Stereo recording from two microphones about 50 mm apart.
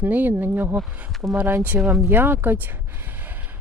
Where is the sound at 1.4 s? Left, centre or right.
Right.